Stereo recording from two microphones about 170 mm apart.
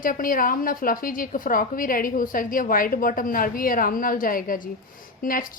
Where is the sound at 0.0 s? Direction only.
55° left (ahead or behind).